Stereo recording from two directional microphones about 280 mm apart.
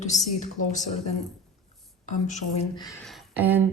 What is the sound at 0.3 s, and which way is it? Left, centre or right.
Speech, left.